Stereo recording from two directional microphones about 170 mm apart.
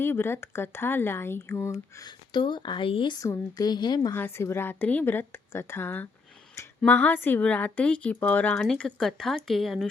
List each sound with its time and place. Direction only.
0.0 s speech: 15° left (ahead or behind)
4.1 s speech: 15° left (ahead or behind)